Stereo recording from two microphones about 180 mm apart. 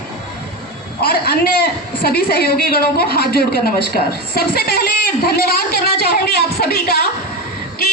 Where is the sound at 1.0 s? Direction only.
60° left (ahead or behind).